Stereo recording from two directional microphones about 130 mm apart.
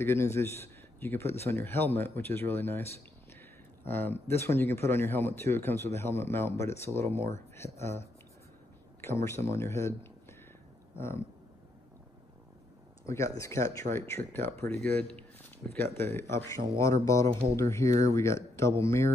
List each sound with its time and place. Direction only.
0.0 s speech: 20° left (ahead or behind)
3.8 s speech: 15° left (ahead or behind)
9.0 s speech: 20° left (ahead or behind)
11.0 s speech: 20° left (ahead or behind)
13.0 s speech: 25° left (ahead or behind)
14.8 s speech: 5° left (ahead or behind)
15.8 s speech: 20° left (ahead or behind)